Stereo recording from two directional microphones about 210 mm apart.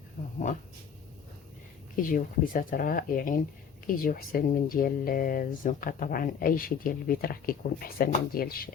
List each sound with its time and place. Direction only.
2.0 s speech: 40° left (ahead or behind)